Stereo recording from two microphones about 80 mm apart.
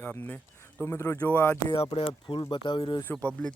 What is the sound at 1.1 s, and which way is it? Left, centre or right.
Speech, left.